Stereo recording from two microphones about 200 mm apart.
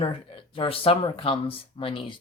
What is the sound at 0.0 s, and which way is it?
Speech, 30° left (ahead or behind).